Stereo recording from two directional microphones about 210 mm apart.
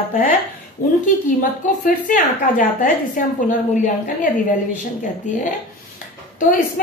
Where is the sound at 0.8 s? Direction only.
40° left (ahead or behind).